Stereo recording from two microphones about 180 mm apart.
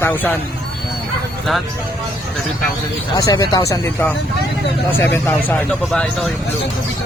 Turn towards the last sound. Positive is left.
turn(degrees=5)  # may be behind; listen again after turning